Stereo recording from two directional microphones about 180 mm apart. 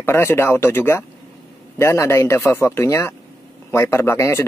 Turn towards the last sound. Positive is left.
turn(degrees=15)  # may be behind; listen again after turning